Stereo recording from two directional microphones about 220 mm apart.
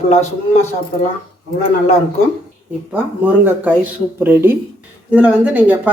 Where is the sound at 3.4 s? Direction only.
5° right (ahead or behind).